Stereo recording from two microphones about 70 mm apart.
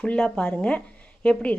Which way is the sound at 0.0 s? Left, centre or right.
Centre.